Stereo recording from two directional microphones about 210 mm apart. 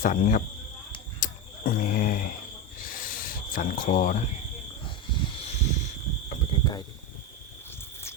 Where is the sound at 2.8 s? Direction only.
40° left (ahead or behind).